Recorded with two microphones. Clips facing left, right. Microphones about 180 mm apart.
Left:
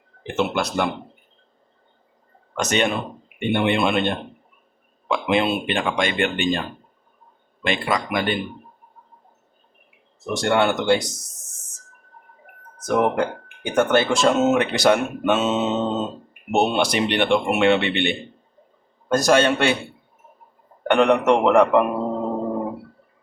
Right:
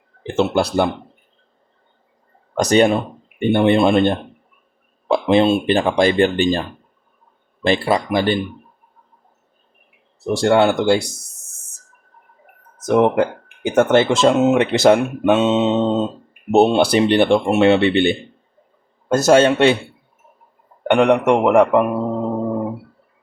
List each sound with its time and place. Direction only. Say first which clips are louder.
0.2 s speech: right 5 dB; 30° right (ahead or behind)
2.6 s speech: right 8 dB; 35° right (ahead or behind)
7.6 s speech: right 6 dB; 35° right (ahead or behind)
10.2 s speech: right 5 dB; 30° right (ahead or behind)
12.9 s speech: right 5 dB; 25° right (ahead or behind)
14.6 s speech: right 5 dB; 25° right (ahead or behind)
20.9 s a man's voice: right 3 dB; 10° right (ahead or behind)